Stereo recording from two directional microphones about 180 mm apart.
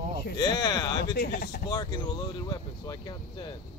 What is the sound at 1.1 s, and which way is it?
Speech, 60° left (ahead or behind).